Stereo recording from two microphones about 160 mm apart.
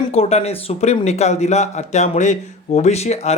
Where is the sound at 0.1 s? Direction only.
40° left (ahead or behind).